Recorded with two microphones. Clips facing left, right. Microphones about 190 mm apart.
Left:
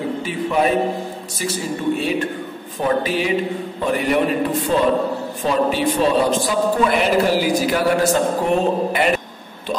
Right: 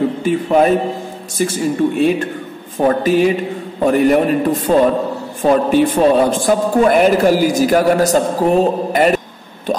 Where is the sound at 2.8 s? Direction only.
45° right (ahead or behind).